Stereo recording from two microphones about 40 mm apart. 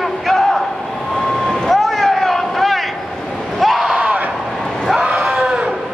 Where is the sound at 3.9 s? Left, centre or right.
Right.